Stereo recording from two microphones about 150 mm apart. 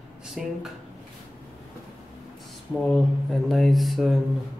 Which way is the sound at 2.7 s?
Centre (ahead or behind).